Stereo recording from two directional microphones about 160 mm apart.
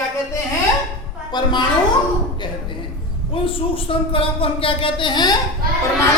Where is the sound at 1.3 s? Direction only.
25° left (ahead or behind).